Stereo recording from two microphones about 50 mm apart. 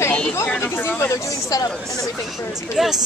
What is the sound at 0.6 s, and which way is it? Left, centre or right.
Chatter, left.